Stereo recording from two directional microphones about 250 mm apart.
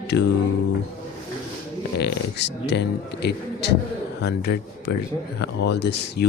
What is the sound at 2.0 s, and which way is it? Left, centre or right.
Speech, left.